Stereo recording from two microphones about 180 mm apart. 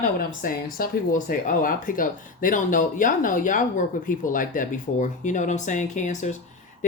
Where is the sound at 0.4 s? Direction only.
50° left (ahead or behind).